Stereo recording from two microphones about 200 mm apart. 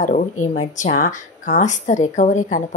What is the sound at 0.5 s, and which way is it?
Speech, 35° left (ahead or behind).